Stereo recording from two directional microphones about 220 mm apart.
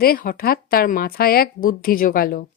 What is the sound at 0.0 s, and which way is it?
Speech, 40° left (ahead or behind).